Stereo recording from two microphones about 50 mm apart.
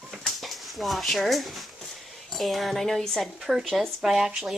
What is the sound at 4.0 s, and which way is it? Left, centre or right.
Speech, centre.